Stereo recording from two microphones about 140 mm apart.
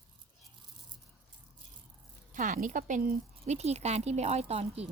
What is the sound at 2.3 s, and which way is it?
Speech, 65° right (ahead or behind).